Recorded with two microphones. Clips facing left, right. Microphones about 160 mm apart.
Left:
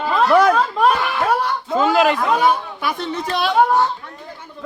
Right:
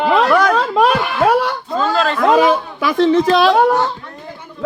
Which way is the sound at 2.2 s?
90° right.